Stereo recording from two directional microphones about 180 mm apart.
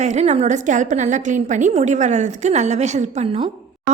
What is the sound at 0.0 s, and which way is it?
A woman's voice, 40° right (ahead or behind).